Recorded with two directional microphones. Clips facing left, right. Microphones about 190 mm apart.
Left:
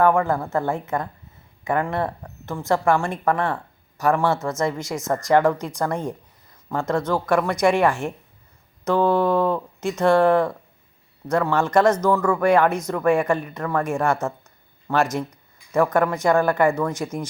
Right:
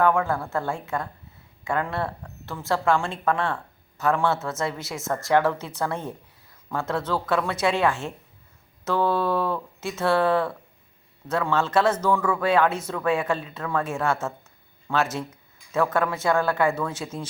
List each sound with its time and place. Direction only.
0.0 s a woman's voice: 15° left (ahead or behind)